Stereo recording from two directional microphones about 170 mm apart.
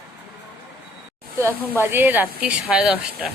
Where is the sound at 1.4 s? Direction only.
15° right (ahead or behind).